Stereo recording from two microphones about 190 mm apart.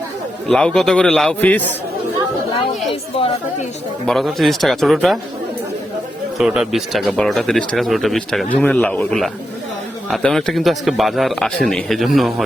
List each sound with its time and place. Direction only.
0.4 s a man's voice: 5° left (ahead or behind)
2.9 s a woman's voice: 30° left (ahead or behind)
4.0 s a man's voice: centre (ahead or behind)
6.4 s a man's voice: 5° right (ahead or behind)